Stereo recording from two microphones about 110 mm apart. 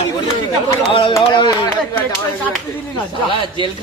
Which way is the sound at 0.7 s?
50° left (ahead or behind).